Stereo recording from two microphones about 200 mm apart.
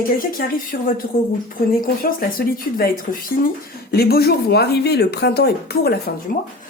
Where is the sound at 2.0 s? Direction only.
45° left (ahead or behind).